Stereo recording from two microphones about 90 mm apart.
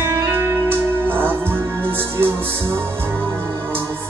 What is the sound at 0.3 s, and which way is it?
Music, 25° right (ahead or behind).